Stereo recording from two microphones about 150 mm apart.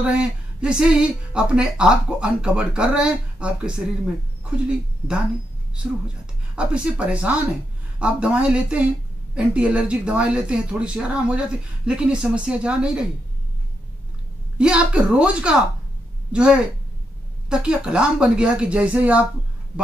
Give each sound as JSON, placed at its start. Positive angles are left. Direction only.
{"t": 0.0, "sound": "speech", "side_deg": -5}
{"t": 6.5, "sound": "speech", "side_deg": -5}
{"t": 14.6, "sound": "a woman's voice", "side_deg": -5}